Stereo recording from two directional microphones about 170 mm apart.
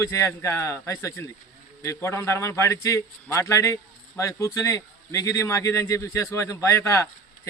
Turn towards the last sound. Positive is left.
turn(degrees=15)  # may be behind; listen again after turning